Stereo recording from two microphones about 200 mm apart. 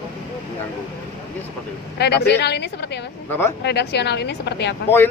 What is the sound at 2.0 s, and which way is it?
Speech, 55° left (ahead or behind).